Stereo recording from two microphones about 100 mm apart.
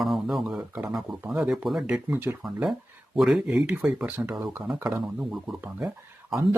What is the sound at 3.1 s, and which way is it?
Speech, centre (ahead or behind).